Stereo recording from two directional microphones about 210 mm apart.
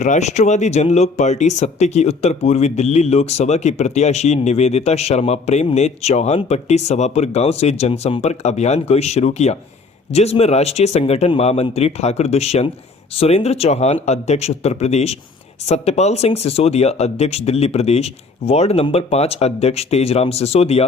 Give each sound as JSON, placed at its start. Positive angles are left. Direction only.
{"t": 0.0, "sound": "speech", "side_deg": 35}